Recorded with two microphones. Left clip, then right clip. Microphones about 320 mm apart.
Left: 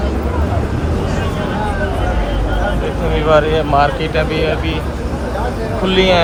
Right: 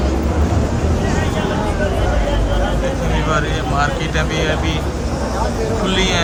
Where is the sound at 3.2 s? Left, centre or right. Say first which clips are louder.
Left 10 dB; centre.